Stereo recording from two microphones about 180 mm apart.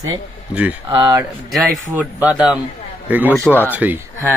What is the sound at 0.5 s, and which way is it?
Speech, 5° right (ahead or behind).